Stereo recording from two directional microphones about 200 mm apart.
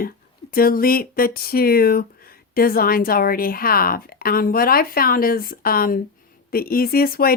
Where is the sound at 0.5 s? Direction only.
45° left (ahead or behind).